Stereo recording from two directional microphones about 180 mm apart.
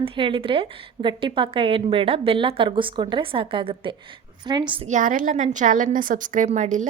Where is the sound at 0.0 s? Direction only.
30° right (ahead or behind).